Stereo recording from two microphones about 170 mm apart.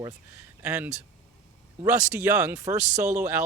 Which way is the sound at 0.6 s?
10° right (ahead or behind).